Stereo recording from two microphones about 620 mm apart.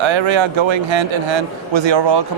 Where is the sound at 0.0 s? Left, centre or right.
Right.